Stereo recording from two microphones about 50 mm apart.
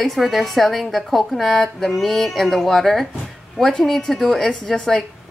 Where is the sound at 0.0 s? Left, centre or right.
Centre.